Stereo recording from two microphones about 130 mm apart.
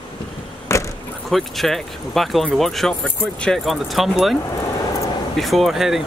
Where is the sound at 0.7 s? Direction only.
20° left (ahead or behind).